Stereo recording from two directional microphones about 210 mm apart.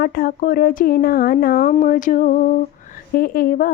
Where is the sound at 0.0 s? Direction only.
45° left (ahead or behind).